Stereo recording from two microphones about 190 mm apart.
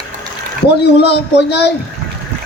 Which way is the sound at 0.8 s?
60° left (ahead or behind).